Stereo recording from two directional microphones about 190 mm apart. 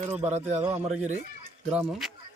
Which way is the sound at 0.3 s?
35° right (ahead or behind).